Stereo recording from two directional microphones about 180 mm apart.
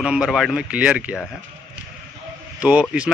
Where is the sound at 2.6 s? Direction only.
5° right (ahead or behind).